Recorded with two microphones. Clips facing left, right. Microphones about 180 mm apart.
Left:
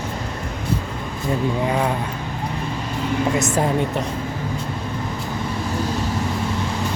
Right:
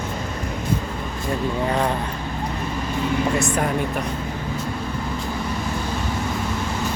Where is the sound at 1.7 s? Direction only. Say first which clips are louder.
Right 1 dB; 5° left (ahead or behind).